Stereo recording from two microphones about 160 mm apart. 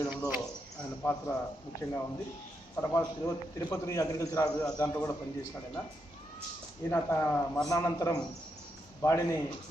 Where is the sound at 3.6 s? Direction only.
20° left (ahead or behind).